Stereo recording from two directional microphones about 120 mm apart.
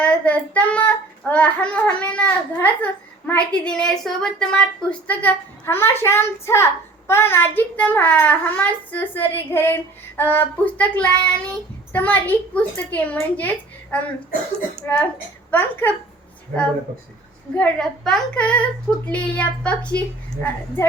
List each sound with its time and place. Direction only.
0.0 s child singing: 10° left (ahead or behind)
4.9 s a child's voice: 15° left (ahead or behind)
7.1 s child singing: 20° left (ahead or behind)
13.3 s a woman's voice: 15° left (ahead or behind)
14.8 s child singing: 15° left (ahead or behind)
17.6 s child singing: 5° left (ahead or behind)